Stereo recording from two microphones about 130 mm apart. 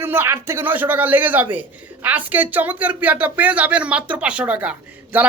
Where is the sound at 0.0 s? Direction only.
20° right (ahead or behind).